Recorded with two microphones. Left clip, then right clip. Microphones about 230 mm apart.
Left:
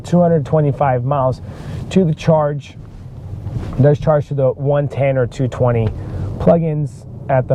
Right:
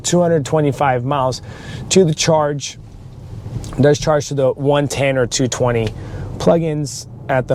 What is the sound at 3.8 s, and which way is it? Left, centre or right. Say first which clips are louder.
Speech: even; right.